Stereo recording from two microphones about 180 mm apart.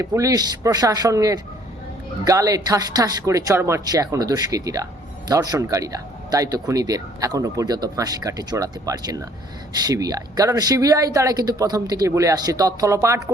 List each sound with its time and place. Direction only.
0.0 s speech: 15° right (ahead or behind)